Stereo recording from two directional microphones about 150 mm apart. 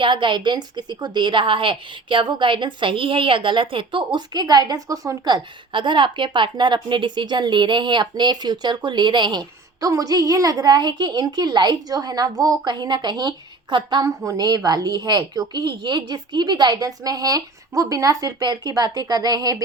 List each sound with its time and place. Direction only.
0.0 s a woman's voice: 35° right (ahead or behind)